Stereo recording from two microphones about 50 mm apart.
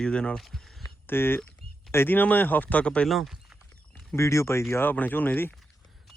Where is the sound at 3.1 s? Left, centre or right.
Centre.